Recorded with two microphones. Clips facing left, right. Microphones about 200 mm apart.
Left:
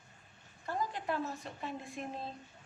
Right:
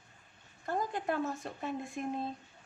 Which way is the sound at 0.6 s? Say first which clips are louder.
Right 3 dB; 50° right (ahead or behind).